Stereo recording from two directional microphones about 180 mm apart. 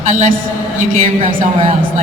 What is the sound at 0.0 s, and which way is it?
Speech, 40° right (ahead or behind).